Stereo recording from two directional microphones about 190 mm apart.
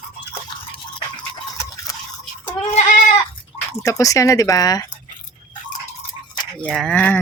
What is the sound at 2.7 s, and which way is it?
Goat, 40° left (ahead or behind).